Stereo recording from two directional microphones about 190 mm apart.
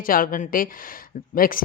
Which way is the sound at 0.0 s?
45° left (ahead or behind).